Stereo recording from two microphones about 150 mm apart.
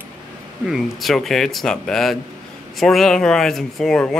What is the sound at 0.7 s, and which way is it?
Speech, centre (ahead or behind).